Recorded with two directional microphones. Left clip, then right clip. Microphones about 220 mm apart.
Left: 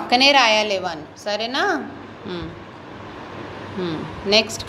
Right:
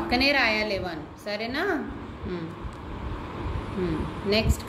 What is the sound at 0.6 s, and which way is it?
Speech, 50° left (ahead or behind).